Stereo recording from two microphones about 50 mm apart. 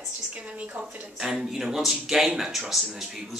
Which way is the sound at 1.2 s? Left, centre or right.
Centre.